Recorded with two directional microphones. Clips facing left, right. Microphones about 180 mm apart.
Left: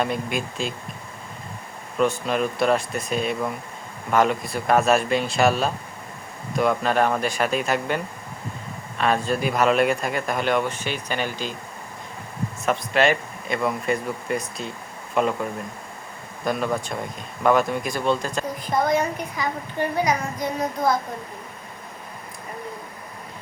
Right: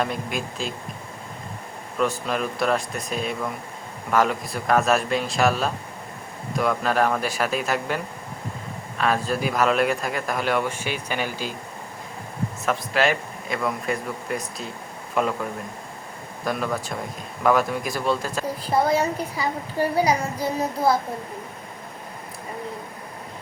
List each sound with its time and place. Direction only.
0.0 s speech: centre (ahead or behind)
2.0 s speech: centre (ahead or behind)
12.6 s speech: centre (ahead or behind)
16.4 s speech: centre (ahead or behind)
18.6 s a woman's voice: 30° right (ahead or behind)